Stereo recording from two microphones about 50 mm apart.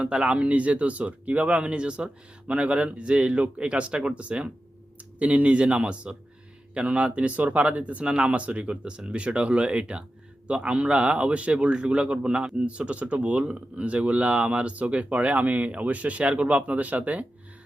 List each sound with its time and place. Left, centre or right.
0.0 s speech: centre